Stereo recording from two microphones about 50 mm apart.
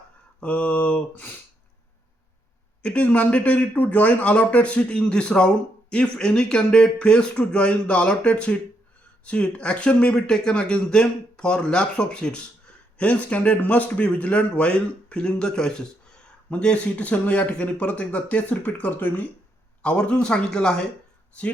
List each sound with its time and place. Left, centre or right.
0.3 s speech: left
2.8 s speech: left
19.8 s speech: left